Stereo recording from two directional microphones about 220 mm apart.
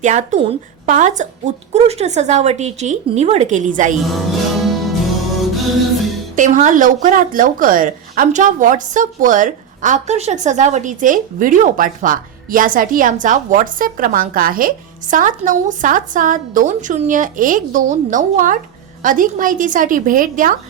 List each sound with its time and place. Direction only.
0.0 s speech: 35° right (ahead or behind)
4.0 s music: centre (ahead or behind)
6.3 s speech: 35° right (ahead or behind)